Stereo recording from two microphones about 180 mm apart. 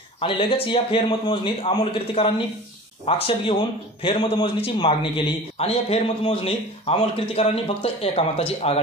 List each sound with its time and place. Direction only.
0.2 s a man's voice: 30° left (ahead or behind)